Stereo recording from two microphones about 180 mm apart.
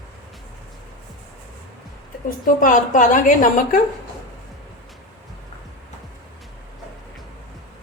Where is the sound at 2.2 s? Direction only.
50° left (ahead or behind).